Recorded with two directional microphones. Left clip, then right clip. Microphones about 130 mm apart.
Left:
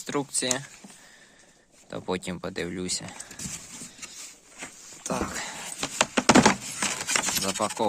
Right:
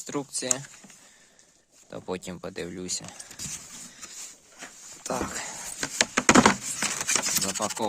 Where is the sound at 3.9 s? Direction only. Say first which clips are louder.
Even; 75° right (ahead or behind).